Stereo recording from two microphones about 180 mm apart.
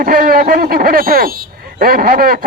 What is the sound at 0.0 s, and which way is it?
Speech, 55° right (ahead or behind).